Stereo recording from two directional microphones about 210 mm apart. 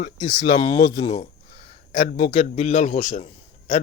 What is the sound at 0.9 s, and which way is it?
A man's voice, 30° left (ahead or behind).